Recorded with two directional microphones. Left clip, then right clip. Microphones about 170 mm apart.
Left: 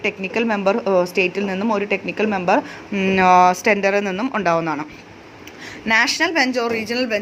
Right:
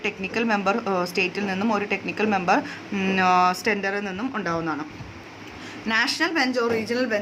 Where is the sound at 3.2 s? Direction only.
35° left (ahead or behind).